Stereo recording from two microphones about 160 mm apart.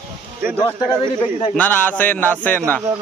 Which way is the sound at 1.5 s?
10° left (ahead or behind).